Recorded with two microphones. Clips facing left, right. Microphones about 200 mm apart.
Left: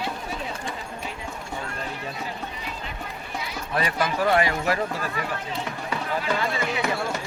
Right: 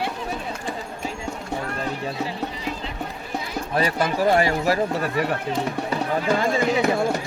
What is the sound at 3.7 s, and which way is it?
Speech, 35° right (ahead or behind).